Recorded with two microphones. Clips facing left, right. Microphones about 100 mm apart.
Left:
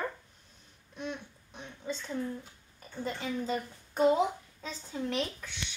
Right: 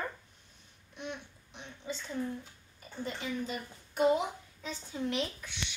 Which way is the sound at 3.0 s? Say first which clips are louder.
Left 3 dB; 35° left (ahead or behind).